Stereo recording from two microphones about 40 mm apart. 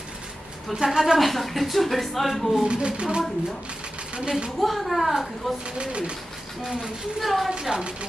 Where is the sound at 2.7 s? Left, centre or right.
Right.